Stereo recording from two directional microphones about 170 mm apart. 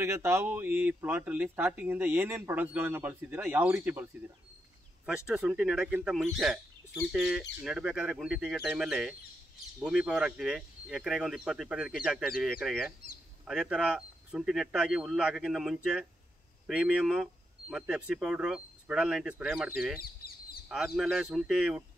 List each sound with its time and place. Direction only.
0.0 s speech: 15° right (ahead or behind)
20.2 s duck: 65° left (ahead or behind)
20.6 s speech: 5° right (ahead or behind)